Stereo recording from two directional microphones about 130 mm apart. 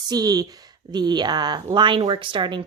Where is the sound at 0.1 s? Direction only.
30° right (ahead or behind).